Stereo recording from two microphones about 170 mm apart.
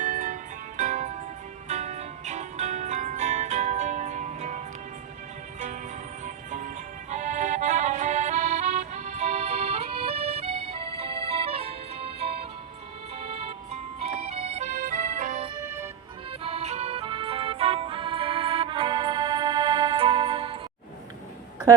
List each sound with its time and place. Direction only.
0.0 s music: 50° right (ahead or behind)
7.1 s accordion: 45° right (ahead or behind)
13.1 s music: 35° right (ahead or behind)
15.6 s music: 15° right (ahead or behind)
16.4 s music: 35° right (ahead or behind)